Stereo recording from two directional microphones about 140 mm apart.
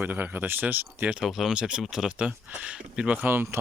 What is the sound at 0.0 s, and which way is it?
Speech, 15° right (ahead or behind).